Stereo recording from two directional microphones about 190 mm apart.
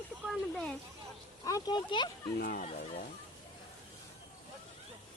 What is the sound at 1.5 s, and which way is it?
Speech, 20° left (ahead or behind).